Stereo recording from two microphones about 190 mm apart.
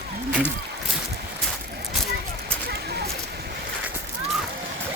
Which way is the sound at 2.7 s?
60° right (ahead or behind).